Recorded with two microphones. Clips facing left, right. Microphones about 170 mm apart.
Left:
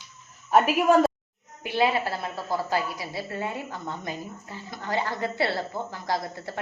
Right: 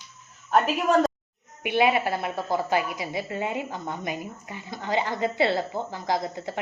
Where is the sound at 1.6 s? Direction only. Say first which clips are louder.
Right 2 dB; 20° right (ahead or behind).